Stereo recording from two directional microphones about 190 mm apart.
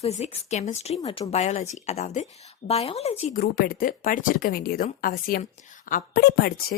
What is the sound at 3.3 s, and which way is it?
A woman's voice, 50° left (ahead or behind).